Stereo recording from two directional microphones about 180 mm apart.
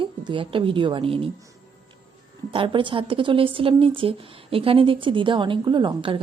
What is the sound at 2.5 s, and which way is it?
Speech, 30° right (ahead or behind).